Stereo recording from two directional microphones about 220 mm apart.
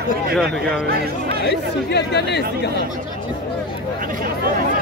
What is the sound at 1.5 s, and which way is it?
Speech, 50° left (ahead or behind).